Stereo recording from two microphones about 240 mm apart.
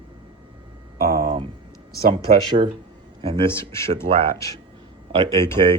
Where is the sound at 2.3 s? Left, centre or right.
Right.